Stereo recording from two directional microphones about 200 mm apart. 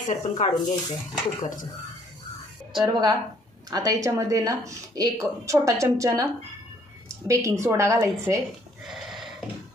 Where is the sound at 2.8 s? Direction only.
20° right (ahead or behind).